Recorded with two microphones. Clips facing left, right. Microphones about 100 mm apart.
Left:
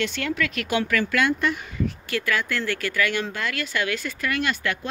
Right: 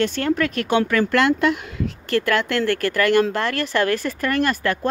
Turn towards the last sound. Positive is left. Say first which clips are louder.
# right 5 dB
turn(degrees=-40)  # may be behind; listen again after turning